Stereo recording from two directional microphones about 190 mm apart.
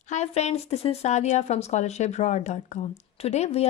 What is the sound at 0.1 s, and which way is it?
Speech, 35° left (ahead or behind).